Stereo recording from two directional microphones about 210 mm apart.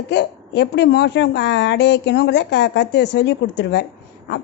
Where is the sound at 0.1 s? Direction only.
55° left (ahead or behind).